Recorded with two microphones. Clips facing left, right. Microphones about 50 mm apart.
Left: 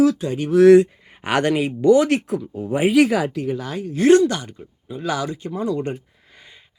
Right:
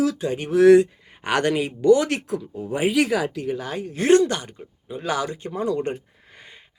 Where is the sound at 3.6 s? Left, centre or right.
Right.